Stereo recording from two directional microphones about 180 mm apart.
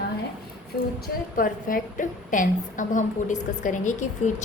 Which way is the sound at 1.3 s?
50° left (ahead or behind).